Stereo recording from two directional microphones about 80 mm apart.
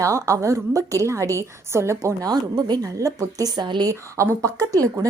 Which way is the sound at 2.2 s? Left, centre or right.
Right.